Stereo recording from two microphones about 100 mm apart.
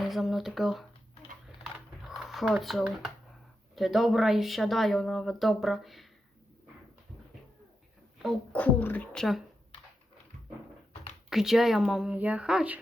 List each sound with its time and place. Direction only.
0.1 s speech: centre (ahead or behind)
1.6 s typing: 5° right (ahead or behind)
3.8 s speech: centre (ahead or behind)
8.5 s speech: 15° left (ahead or behind)
9.1 s speech: centre (ahead or behind)
11.3 s speech: 5° right (ahead or behind)